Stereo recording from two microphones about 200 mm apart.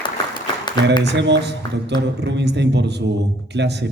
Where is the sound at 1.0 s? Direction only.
60° right (ahead or behind).